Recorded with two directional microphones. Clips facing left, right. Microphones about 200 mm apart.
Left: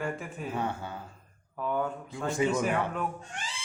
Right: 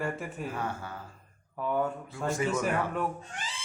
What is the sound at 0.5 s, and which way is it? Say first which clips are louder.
Speech: left 2 dB; 25° left (ahead or behind).